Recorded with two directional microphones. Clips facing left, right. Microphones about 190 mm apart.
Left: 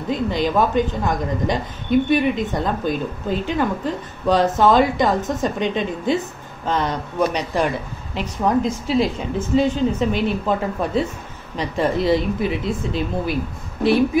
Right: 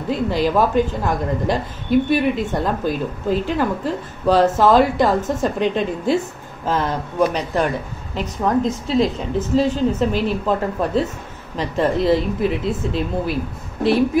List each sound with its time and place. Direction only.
0.1 s speech: 5° right (ahead or behind)